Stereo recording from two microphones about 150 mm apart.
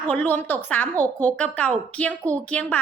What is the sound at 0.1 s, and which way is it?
Speech, 10° left (ahead or behind).